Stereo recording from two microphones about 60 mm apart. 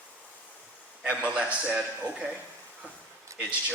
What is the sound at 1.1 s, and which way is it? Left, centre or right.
A man's voice, right.